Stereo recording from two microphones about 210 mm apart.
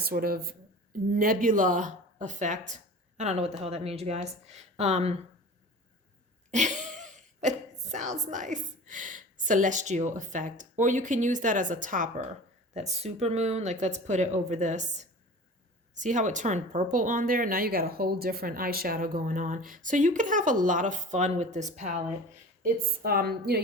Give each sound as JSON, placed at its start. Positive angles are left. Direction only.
{"t": 0.0, "sound": "a woman's voice", "side_deg": -45}
{"t": 6.5, "sound": "throat clearing", "side_deg": -35}
{"t": 8.3, "sound": "speech", "side_deg": -35}
{"t": 22.6, "sound": "a woman's voice", "side_deg": -45}